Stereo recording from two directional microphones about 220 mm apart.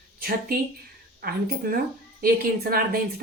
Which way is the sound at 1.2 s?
45° right (ahead or behind).